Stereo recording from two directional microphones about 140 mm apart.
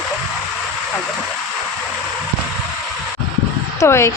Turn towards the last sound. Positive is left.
turn(degrees=20)  # may be behind; listen again after turning